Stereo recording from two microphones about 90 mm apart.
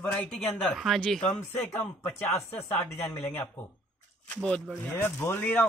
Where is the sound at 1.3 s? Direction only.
25° left (ahead or behind).